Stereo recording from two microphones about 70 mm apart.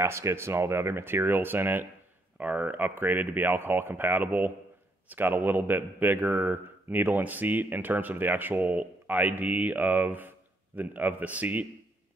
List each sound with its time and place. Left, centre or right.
0.0 s a man's voice: right